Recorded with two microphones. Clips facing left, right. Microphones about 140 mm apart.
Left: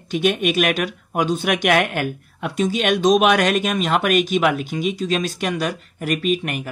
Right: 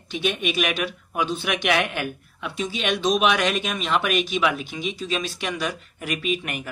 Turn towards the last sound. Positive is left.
turn(degrees=40)  # may be behind; listen again after turning